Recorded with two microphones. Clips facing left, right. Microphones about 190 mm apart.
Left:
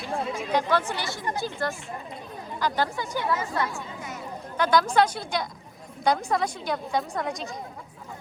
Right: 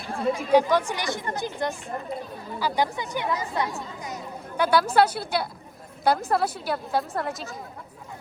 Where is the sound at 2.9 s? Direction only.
20° right (ahead or behind).